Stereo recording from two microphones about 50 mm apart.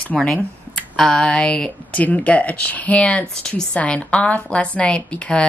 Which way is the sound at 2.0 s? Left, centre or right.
Left.